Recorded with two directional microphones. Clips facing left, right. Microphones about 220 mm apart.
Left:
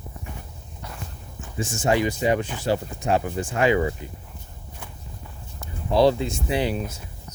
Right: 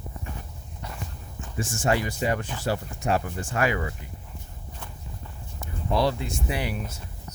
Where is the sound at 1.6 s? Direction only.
20° left (ahead or behind).